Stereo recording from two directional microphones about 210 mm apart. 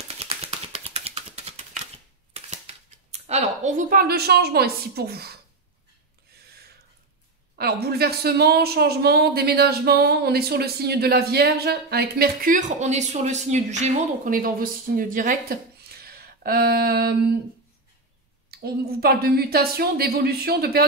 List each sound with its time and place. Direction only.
0.1 s a sound: 30° right (ahead or behind)
2.3 s speech: 30° right (ahead or behind); by 5.3 s 50° right (ahead or behind)
7.5 s a woman's voice: 50° right (ahead or behind)
18.5 s a woman's voice: 45° right (ahead or behind)